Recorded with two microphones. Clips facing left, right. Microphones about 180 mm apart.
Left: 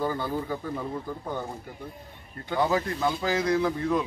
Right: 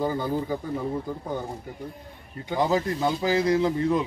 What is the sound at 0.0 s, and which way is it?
Speech, 15° right (ahead or behind).